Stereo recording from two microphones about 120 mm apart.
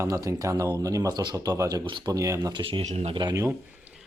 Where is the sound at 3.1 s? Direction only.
35° right (ahead or behind).